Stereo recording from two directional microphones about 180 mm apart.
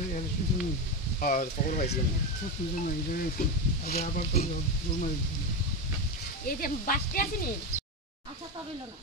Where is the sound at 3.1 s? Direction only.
55° left (ahead or behind).